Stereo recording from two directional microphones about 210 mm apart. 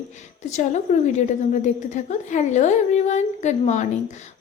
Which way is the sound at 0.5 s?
35° left (ahead or behind).